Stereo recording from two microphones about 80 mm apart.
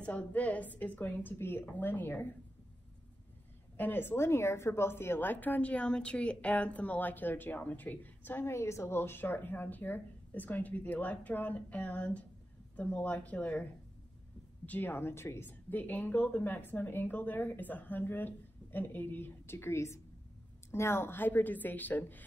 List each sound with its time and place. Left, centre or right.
0.0 s a woman's voice: centre
3.7 s a woman's voice: left
14.7 s a woman's voice: left